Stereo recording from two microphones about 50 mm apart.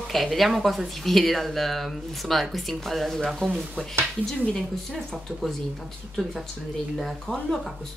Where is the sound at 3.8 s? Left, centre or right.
Centre.